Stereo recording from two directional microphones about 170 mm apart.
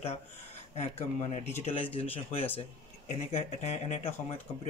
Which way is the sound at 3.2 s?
40° left (ahead or behind).